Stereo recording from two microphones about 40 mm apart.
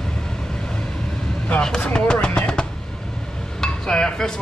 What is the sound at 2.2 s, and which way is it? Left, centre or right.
Speech, left.